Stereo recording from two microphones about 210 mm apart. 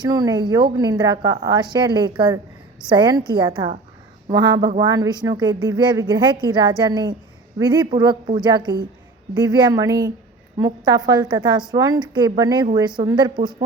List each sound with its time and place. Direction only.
0.0 s a woman's voice: 20° right (ahead or behind)